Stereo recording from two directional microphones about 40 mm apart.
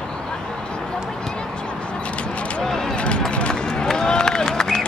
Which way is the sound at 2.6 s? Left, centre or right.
Centre.